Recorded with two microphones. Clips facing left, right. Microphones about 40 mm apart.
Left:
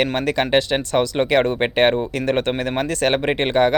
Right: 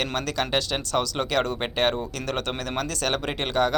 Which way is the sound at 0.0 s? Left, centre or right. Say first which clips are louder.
Left 7 dB; left.